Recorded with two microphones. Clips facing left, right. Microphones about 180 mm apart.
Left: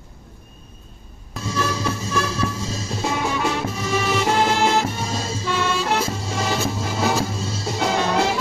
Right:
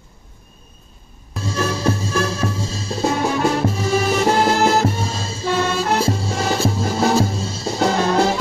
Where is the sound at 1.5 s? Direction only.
40° right (ahead or behind).